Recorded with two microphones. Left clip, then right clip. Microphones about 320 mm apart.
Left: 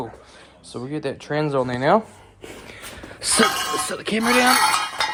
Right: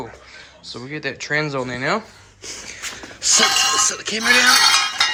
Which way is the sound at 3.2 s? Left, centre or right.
Centre.